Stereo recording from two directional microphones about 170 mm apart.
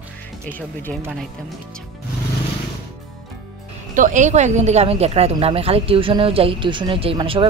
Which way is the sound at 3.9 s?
50° right (ahead or behind).